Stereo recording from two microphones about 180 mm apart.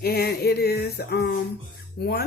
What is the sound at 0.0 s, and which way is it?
Music, 60° left (ahead or behind).